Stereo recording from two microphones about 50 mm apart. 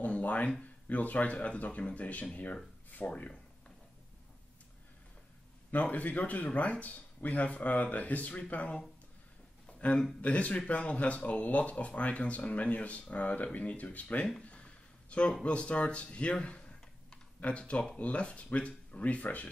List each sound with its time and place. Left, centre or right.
0.0 s speech: left
5.7 s speech: left
9.7 s a sound: left
10.2 s speech: left
14.4 s a sound: left
15.4 s speech: left